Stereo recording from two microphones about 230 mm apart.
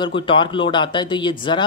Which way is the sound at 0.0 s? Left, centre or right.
Left.